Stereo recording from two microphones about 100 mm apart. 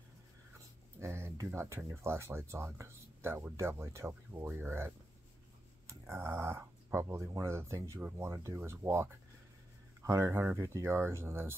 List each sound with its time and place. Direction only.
0.9 s speech: 25° right (ahead or behind)